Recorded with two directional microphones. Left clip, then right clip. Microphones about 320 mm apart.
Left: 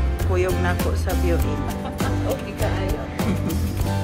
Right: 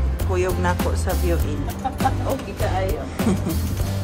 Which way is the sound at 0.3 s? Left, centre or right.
Centre.